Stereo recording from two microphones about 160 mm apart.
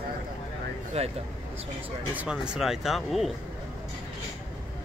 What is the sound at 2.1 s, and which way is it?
Speech, 5° right (ahead or behind).